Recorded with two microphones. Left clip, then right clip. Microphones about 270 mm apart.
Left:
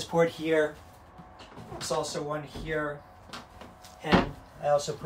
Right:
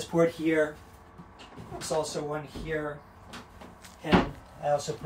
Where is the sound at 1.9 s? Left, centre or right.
Left.